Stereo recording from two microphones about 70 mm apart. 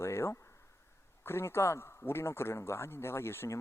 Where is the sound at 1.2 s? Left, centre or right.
Left.